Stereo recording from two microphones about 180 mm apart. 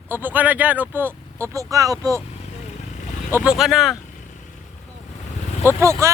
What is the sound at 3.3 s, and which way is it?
Speech, 5° right (ahead or behind).